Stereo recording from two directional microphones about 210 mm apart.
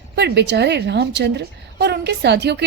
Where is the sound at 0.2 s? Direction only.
55° right (ahead or behind).